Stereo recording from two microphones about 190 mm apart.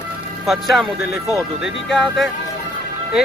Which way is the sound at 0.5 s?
Centre (ahead or behind).